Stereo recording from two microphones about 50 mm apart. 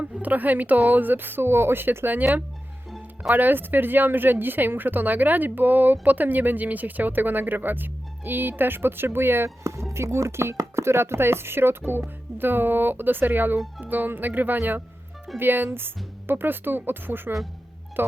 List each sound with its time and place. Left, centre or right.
0.0 s speech: right
9.9 s speech: right